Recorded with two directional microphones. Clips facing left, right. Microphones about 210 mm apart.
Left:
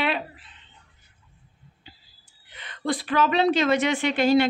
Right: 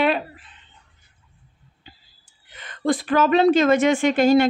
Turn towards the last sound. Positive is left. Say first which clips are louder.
# right 4 dB
turn(degrees=-45)  # may be behind; listen again after turning